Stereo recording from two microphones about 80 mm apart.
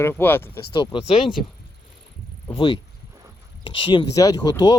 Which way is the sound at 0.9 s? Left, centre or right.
Left.